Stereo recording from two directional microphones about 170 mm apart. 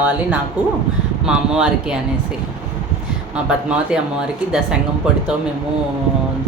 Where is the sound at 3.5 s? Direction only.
5° right (ahead or behind).